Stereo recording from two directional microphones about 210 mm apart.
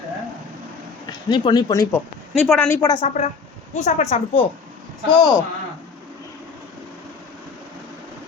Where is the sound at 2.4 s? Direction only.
5° left (ahead or behind).